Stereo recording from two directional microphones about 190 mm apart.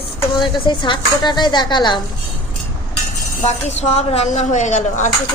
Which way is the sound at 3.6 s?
35° left (ahead or behind).